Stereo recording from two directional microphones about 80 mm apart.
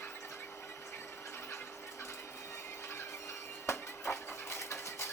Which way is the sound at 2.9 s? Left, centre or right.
Left.